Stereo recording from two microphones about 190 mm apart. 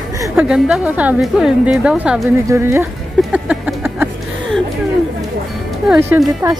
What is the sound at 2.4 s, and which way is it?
Speech, 15° right (ahead or behind).